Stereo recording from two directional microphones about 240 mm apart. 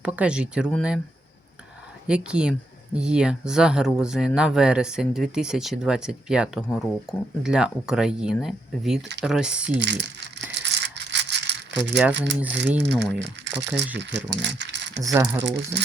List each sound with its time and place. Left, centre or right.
0.0 s speech: centre
2.0 s speech: centre
9.6 s speech: right
10.5 s rattle: right
12.1 s speech: right
15.0 s speech: centre
15.4 s speech: right